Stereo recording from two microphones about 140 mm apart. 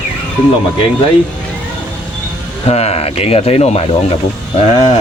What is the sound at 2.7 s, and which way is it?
Speech, 50° left (ahead or behind).